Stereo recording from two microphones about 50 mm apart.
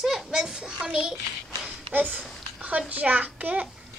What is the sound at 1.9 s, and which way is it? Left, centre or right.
A child's voice, right.